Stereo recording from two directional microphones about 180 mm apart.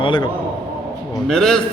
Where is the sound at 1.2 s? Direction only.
Centre (ahead or behind).